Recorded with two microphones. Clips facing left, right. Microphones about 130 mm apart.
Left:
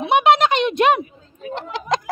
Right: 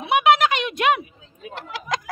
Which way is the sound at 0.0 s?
25° left (ahead or behind).